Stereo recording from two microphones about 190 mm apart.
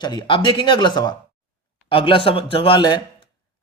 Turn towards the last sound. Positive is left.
turn(degrees=25)  # may be behind; listen again after turning